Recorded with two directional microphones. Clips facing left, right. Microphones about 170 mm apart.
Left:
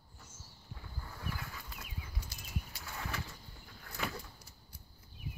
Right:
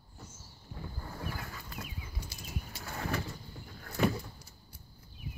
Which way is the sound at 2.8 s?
45° right (ahead or behind).